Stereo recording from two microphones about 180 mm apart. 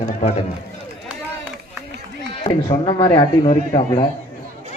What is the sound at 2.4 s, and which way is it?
Speech, 25° left (ahead or behind).